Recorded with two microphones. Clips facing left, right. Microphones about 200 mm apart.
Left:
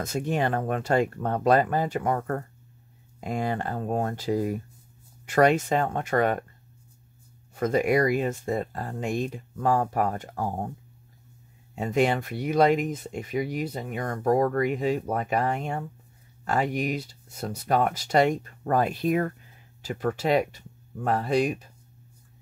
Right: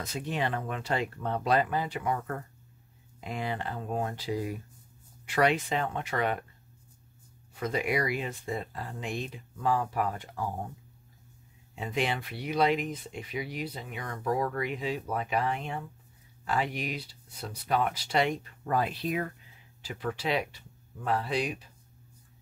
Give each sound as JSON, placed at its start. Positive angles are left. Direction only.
{"t": 0.0, "sound": "speech", "side_deg": 45}
{"t": 7.5, "sound": "speech", "side_deg": 45}
{"t": 11.7, "sound": "speech", "side_deg": 45}